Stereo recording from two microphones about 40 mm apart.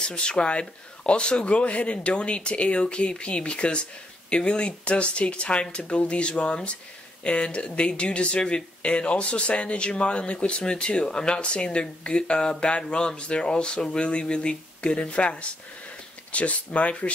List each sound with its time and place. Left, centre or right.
0.1 s speech: left